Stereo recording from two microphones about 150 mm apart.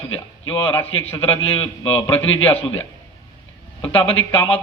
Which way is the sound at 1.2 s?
40° left (ahead or behind).